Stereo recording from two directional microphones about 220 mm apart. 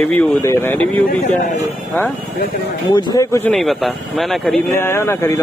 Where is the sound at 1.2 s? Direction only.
35° left (ahead or behind).